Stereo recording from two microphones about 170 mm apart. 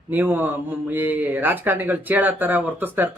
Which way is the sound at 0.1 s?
10° right (ahead or behind).